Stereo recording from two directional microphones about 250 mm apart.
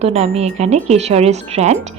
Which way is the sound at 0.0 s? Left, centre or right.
Right.